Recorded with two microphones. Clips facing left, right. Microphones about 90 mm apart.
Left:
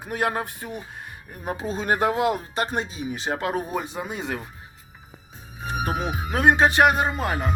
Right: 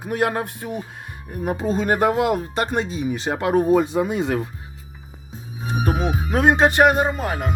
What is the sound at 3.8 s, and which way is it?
Speech, 75° right (ahead or behind).